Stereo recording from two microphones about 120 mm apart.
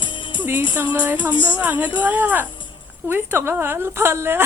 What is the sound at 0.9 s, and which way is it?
Speech, 15° right (ahead or behind).